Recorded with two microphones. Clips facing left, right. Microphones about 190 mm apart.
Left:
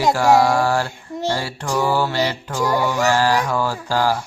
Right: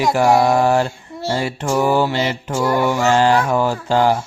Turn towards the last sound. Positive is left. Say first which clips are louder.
# right 4 dB
turn(degrees=-20)  # may be behind; listen again after turning